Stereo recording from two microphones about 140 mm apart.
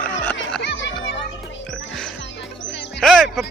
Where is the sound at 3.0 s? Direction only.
5° left (ahead or behind).